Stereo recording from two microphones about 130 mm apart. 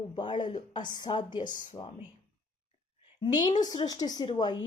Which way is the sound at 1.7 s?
50° left (ahead or behind).